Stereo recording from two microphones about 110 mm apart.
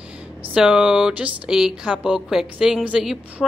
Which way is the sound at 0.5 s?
10° right (ahead or behind).